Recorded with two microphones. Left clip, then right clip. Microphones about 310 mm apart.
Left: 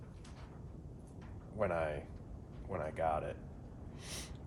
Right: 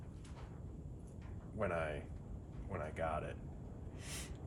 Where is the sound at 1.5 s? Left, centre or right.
Left.